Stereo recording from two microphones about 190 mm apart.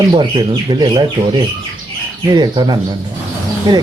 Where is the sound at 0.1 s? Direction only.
20° right (ahead or behind).